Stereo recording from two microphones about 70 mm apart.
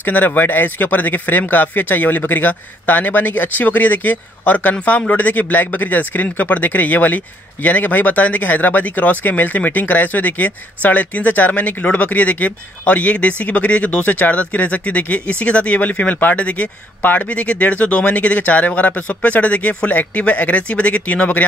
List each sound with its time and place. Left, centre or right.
0.0 s speech: left